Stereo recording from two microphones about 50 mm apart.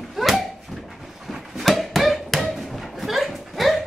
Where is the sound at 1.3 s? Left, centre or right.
Centre.